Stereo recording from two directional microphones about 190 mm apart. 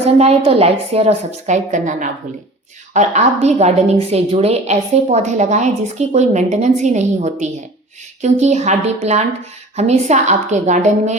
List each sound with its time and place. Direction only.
0.0 s a woman's voice: 30° right (ahead or behind)